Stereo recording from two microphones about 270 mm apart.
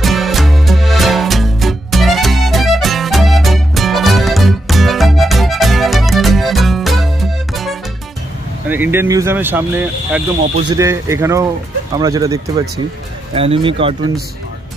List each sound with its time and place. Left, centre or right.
0.0 s music: centre
8.6 s speech: centre